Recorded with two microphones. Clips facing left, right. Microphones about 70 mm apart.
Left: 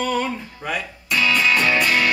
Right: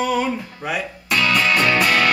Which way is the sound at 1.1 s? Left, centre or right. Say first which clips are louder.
Right 1 dB; right.